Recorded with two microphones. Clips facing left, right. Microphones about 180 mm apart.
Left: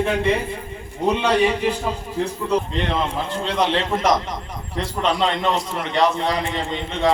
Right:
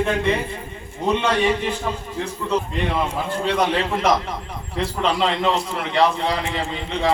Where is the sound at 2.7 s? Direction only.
5° right (ahead or behind).